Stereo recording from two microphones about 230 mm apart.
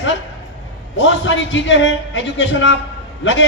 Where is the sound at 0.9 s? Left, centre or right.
Left.